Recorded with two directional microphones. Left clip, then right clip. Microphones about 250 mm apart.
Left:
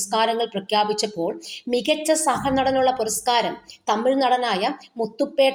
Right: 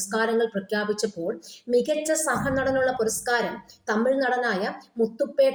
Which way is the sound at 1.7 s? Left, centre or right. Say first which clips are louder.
Right 2 dB; left.